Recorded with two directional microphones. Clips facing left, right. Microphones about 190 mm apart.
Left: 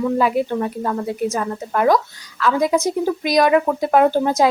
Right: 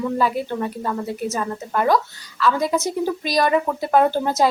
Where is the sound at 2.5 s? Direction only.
5° left (ahead or behind).